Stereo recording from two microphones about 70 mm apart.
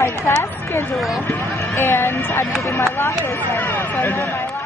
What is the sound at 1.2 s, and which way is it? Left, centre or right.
Speech, left.